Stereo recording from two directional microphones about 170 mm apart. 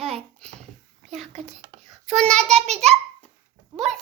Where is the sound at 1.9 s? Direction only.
5° left (ahead or behind).